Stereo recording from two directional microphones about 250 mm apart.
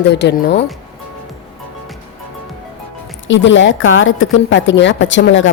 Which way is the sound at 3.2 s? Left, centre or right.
Left.